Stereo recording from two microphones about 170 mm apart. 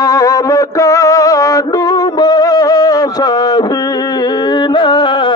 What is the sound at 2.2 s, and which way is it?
Music, 25° left (ahead or behind).